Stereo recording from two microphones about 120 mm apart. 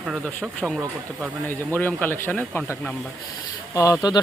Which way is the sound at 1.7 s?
15° left (ahead or behind).